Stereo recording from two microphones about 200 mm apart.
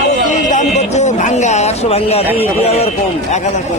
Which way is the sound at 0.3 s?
40° left (ahead or behind).